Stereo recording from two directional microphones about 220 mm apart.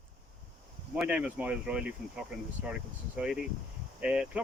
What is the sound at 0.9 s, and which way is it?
Speech, 5° right (ahead or behind).